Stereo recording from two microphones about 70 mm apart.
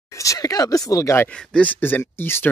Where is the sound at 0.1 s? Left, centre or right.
Left.